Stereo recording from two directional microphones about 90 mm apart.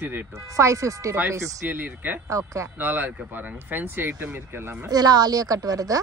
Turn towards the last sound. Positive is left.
turn(degrees=-45)  # may be behind; listen again after turning